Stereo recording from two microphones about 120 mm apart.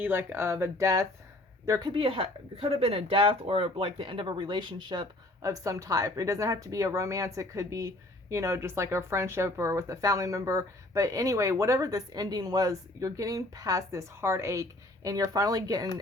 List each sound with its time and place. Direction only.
0.0 s speech: 15° right (ahead or behind)
1.9 s speech: 50° right (ahead or behind)
5.5 s speech: 30° right (ahead or behind)